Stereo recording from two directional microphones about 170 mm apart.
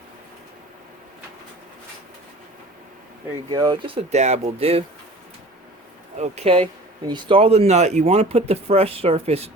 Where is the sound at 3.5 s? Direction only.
25° right (ahead or behind).